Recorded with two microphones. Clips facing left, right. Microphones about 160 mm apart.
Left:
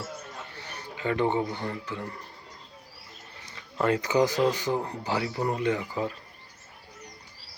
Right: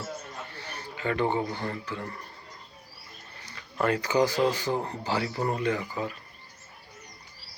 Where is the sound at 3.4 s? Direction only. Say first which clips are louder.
Left 1 dB; 20° left (ahead or behind).